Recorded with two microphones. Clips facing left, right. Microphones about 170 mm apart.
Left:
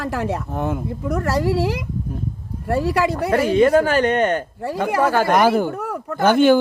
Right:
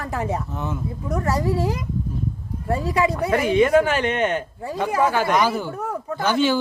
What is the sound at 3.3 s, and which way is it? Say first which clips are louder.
Speech: left 2 dB; 35° left (ahead or behind).